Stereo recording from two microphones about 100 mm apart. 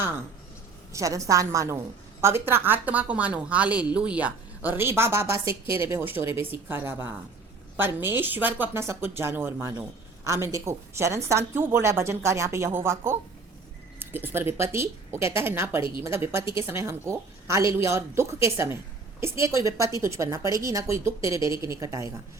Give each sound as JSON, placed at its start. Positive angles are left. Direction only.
{"t": 0.9, "sound": "a woman's voice", "side_deg": -35}